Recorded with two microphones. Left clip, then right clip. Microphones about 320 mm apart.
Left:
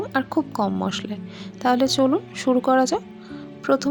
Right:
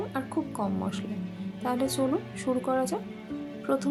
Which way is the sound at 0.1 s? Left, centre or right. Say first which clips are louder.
Left 9 dB; right.